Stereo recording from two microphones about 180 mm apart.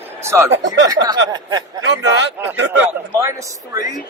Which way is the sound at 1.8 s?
80° right.